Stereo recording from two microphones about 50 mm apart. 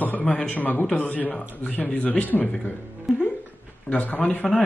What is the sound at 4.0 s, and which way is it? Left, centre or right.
Speech, left.